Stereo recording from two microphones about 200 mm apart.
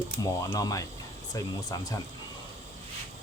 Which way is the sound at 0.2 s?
20° left (ahead or behind).